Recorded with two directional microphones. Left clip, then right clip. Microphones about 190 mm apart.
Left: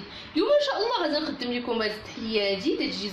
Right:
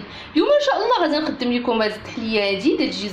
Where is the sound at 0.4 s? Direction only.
25° right (ahead or behind).